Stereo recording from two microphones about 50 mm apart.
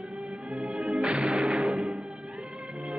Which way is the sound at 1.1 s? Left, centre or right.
Right.